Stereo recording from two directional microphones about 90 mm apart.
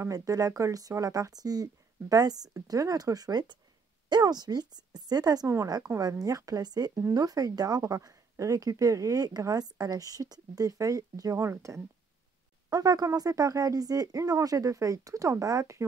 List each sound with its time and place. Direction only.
0.1 s a woman's voice: 40° right (ahead or behind)
12.6 s speech: 45° right (ahead or behind)